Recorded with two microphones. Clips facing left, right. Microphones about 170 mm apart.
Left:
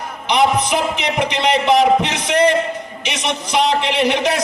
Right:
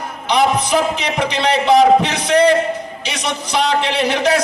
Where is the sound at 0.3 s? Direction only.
20° left (ahead or behind).